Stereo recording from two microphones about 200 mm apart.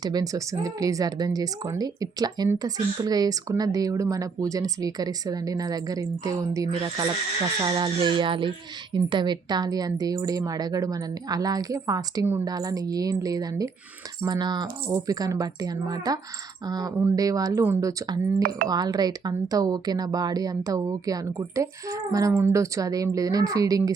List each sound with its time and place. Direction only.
0.0 s speech: 20° right (ahead or behind)